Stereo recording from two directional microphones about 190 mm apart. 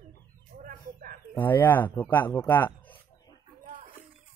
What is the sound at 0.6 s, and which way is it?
Bird, 45° right (ahead or behind).